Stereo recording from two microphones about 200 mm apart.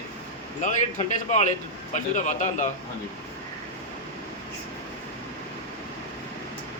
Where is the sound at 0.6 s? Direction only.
35° left (ahead or behind).